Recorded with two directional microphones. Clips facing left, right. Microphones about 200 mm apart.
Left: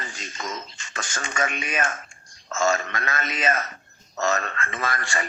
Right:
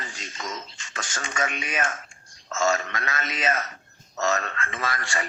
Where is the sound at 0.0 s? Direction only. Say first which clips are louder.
Left 2 dB; 50° left (ahead or behind).